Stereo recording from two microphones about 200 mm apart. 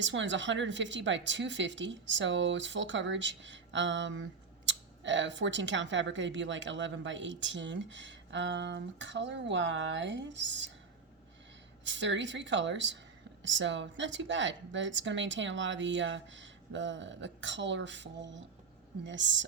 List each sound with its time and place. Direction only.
0.0 s speech: 65° right (ahead or behind)
11.9 s speech: 65° right (ahead or behind)